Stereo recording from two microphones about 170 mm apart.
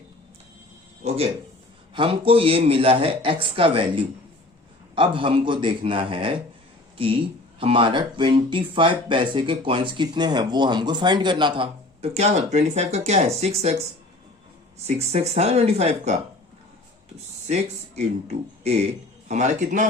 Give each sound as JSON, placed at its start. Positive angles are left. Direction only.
{"t": 1.0, "sound": "speech", "side_deg": -35}
{"t": 14.8, "sound": "speech", "side_deg": -40}
{"t": 17.4, "sound": "a man's voice", "side_deg": -40}